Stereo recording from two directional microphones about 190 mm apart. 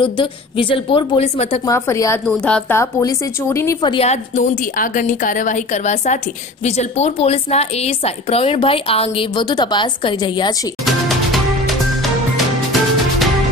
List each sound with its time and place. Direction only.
0.0 s a woman's voice: 25° left (ahead or behind)
1.7 s a woman's voice: 15° left (ahead or behind)
2.2 s a woman's voice: 5° left (ahead or behind)
3.9 s a woman's voice: 35° left (ahead or behind)
10.9 s music: centre (ahead or behind)